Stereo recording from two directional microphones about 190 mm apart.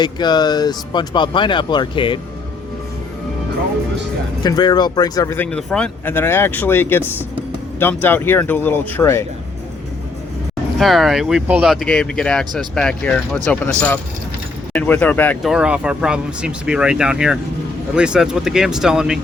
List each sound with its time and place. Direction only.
0.0 s speech: 20° left (ahead or behind)
4.4 s speech: 20° left (ahead or behind)
10.8 s speech: centre (ahead or behind)
15.5 s speech: 5° right (ahead or behind)